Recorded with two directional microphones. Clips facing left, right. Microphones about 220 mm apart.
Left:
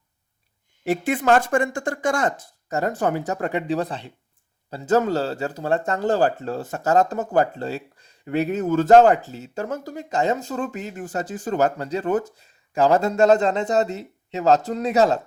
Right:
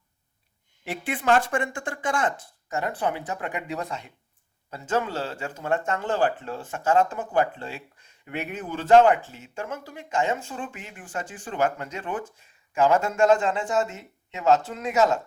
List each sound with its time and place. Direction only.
0.9 s speech: 40° left (ahead or behind)